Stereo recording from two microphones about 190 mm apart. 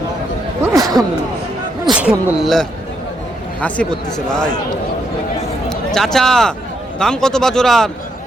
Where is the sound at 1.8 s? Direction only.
5° right (ahead or behind).